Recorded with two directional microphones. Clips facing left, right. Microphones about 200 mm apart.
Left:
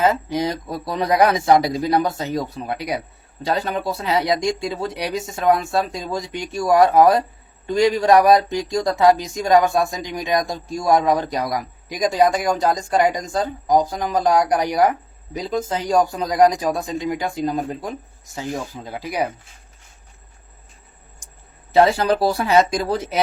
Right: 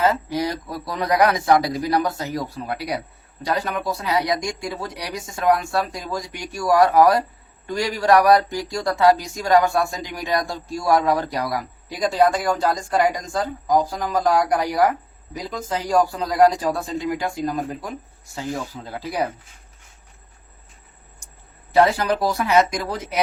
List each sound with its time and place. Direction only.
0.0 s speech: 20° left (ahead or behind)
21.7 s speech: 25° left (ahead or behind)